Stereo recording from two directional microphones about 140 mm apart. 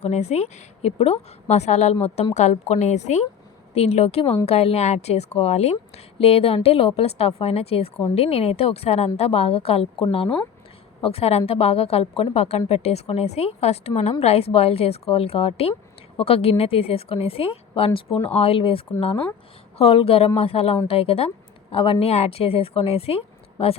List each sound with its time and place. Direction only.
0.0 s a woman's voice: 50° left (ahead or behind)
19.8 s a woman's voice: 40° left (ahead or behind)